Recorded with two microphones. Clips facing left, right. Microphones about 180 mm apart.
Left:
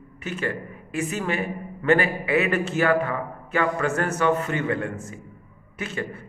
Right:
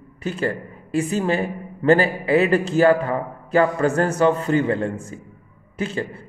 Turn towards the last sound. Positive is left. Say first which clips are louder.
# right 5 dB
turn(degrees=-30)  # may be behind; listen again after turning